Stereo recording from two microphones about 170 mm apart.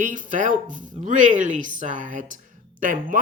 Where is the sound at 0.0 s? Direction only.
50° right (ahead or behind).